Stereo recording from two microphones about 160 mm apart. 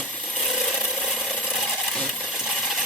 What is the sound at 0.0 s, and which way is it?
Filing, 5° left (ahead or behind).